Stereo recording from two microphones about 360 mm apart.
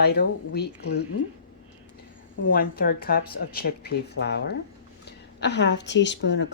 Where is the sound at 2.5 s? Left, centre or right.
Left.